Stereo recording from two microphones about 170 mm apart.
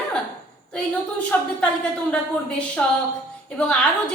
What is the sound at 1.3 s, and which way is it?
Speech, 5° left (ahead or behind).